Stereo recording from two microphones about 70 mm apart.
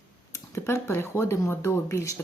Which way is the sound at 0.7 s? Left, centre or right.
Left.